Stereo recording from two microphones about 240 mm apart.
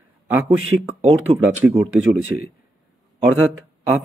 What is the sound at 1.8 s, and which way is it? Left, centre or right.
Speech, right.